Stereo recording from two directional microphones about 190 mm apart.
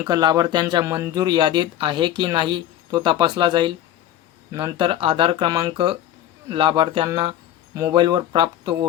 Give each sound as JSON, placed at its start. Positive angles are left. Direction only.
{"t": 0.1, "sound": "speech", "side_deg": -20}